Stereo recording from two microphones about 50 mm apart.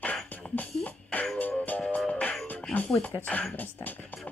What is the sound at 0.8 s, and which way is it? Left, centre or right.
Music, left.